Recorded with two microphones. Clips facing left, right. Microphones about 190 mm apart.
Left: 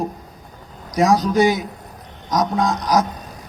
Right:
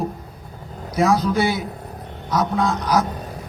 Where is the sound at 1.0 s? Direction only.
40° left (ahead or behind).